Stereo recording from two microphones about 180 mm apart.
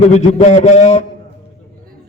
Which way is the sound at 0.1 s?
40° left (ahead or behind).